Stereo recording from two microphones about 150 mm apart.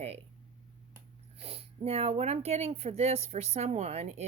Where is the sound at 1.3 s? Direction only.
40° right (ahead or behind).